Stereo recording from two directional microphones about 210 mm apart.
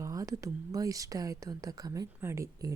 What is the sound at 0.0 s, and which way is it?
Speech, 15° right (ahead or behind).